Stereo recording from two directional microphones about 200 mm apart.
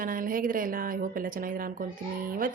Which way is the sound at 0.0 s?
45° right (ahead or behind).